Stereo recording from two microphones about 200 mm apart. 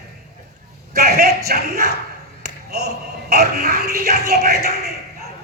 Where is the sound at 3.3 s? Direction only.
50° right (ahead or behind).